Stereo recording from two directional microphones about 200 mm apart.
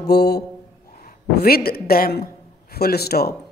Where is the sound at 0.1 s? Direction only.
55° left (ahead or behind).